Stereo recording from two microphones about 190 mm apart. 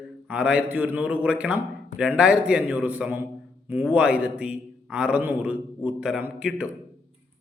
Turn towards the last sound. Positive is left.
turn(degrees=-5)  # may be behind; listen again after turning